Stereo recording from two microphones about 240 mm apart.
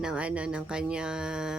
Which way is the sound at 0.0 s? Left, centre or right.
Centre.